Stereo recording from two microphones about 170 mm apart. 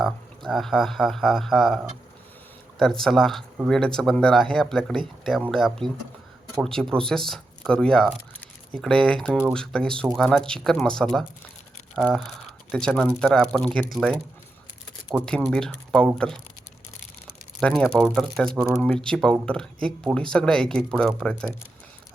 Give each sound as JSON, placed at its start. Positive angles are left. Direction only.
{"t": 0.0, "sound": "speech", "side_deg": 0}
{"t": 15.2, "sound": "speech", "side_deg": 5}
{"t": 17.6, "sound": "speech", "side_deg": 5}